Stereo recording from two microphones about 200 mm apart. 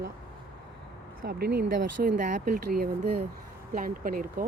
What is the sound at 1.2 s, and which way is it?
Speech, 50° right (ahead or behind).